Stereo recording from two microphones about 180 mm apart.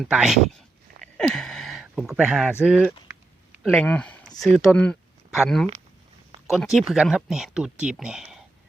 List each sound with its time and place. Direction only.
0.0 s speech: 5° right (ahead or behind)
1.0 s a sound: 5° left (ahead or behind)
3.6 s speech: 5° left (ahead or behind)